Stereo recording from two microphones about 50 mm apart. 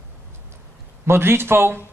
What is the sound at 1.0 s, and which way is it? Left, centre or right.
Speech, right.